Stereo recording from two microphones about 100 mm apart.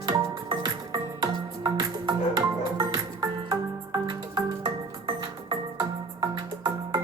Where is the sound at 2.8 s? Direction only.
35° right (ahead or behind).